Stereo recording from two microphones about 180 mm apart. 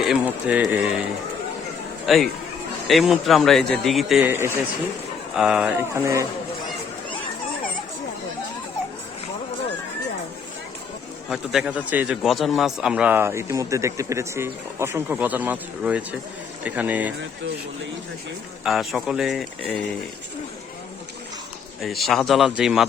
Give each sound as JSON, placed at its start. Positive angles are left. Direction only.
{"t": 0.1, "sound": "a man's voice", "side_deg": -10}
{"t": 2.0, "sound": "speech", "side_deg": 0}
{"t": 4.3, "sound": "a man's voice", "side_deg": -15}
{"t": 5.4, "sound": "speech", "side_deg": -5}
{"t": 5.7, "sound": "a man's voice", "side_deg": -15}
{"t": 11.3, "sound": "a man's voice", "side_deg": -5}
{"t": 18.6, "sound": "speech", "side_deg": 0}
{"t": 21.8, "sound": "speech", "side_deg": 0}